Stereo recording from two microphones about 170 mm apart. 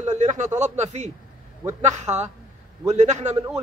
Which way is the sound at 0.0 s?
45° right (ahead or behind).